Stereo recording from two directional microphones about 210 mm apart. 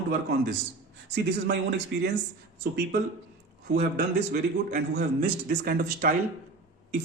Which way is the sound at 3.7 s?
50° right (ahead or behind).